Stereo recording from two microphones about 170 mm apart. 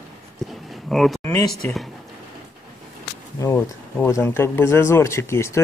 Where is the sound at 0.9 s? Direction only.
Centre (ahead or behind).